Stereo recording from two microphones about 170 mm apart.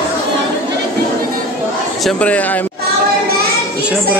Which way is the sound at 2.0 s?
5° left (ahead or behind).